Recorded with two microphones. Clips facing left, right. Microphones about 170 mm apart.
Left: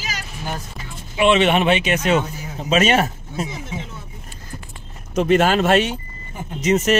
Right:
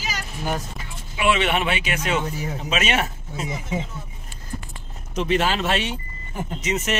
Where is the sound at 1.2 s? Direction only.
25° left (ahead or behind).